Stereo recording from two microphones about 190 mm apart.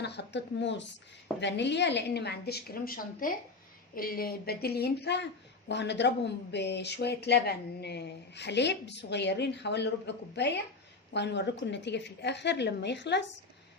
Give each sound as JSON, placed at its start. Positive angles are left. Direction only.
{"t": 0.0, "sound": "speech", "side_deg": 65}